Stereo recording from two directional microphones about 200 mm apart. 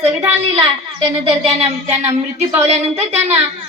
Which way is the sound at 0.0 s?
10° right (ahead or behind).